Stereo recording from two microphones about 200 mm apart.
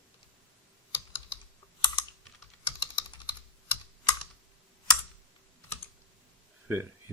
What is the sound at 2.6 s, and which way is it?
Typing, 25° left (ahead or behind).